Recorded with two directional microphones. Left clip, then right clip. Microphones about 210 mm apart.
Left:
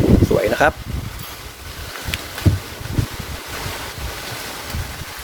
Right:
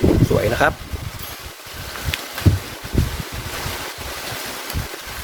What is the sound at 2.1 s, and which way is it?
Boat, 15° left (ahead or behind).